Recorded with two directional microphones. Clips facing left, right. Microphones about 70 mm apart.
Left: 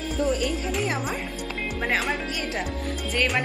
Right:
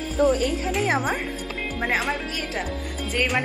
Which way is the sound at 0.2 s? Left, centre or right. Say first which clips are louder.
Right 5 dB; right.